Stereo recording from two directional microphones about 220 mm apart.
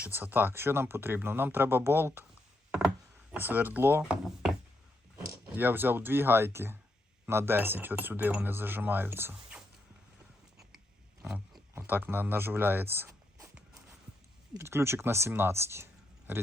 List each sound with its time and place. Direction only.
0.0 s speech: 10° right (ahead or behind)
3.3 s speech: 10° right (ahead or behind)
11.2 s speech: 5° right (ahead or behind)
14.5 s speech: 10° right (ahead or behind)